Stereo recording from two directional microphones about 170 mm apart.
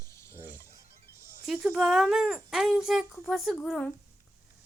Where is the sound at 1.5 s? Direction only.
5° right (ahead or behind).